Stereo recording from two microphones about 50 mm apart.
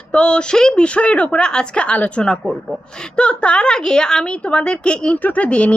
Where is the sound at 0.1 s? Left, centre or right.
Centre.